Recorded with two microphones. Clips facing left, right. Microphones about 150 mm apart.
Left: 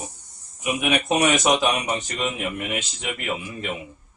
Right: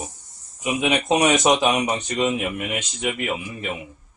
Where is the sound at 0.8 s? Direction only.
20° right (ahead or behind).